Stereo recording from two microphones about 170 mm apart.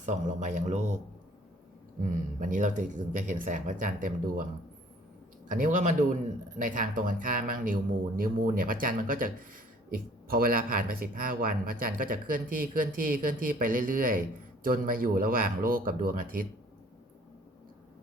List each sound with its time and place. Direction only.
0.0 s speech: 45° right (ahead or behind)
5.5 s speech: 50° right (ahead or behind)